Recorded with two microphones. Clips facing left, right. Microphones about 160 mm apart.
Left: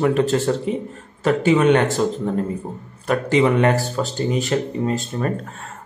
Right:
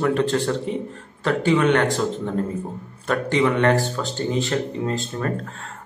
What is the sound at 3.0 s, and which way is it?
Speech, 10° left (ahead or behind).